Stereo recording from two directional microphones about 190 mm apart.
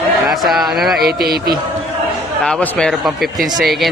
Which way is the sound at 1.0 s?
55° right (ahead or behind).